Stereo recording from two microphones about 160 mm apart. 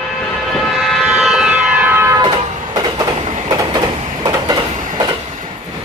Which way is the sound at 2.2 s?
30° right (ahead or behind).